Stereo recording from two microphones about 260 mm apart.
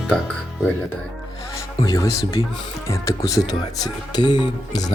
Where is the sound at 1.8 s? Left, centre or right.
Centre.